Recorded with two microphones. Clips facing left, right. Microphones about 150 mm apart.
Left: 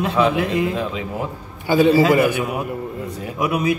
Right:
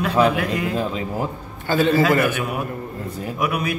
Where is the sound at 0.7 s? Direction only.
35° right (ahead or behind).